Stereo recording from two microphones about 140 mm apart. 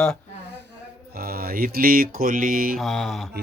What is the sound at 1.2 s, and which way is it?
Mantra, 90° right.